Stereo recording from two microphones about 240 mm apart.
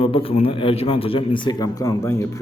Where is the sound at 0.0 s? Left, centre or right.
Left.